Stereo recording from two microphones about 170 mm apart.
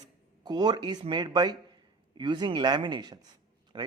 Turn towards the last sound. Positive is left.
turn(degrees=-25)  # may be behind; listen again after turning